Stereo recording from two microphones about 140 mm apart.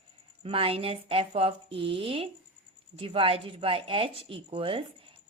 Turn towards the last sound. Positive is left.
turn(degrees=-40)  # may be behind; listen again after turning